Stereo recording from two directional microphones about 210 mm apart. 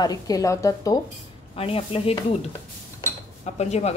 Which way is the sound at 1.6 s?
25° left (ahead or behind).